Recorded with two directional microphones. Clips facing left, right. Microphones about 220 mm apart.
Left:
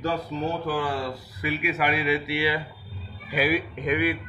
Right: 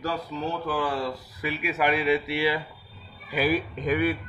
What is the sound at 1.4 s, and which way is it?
A man's voice, 10° left (ahead or behind).